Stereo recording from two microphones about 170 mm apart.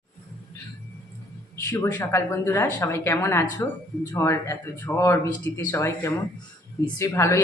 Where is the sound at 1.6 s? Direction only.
15° left (ahead or behind).